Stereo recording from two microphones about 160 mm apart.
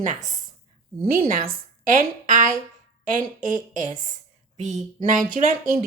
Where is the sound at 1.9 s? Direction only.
55° right (ahead or behind).